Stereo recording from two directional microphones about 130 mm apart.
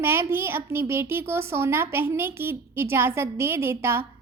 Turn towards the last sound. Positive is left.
turn(degrees=-20)  # may be behind; listen again after turning